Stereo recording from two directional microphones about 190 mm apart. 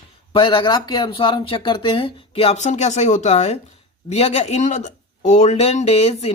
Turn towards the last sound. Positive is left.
turn(degrees=35)  # may be behind; listen again after turning